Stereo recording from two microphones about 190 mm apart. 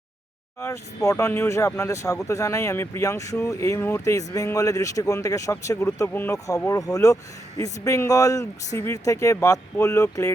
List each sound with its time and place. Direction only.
0.6 s speech: 15° left (ahead or behind)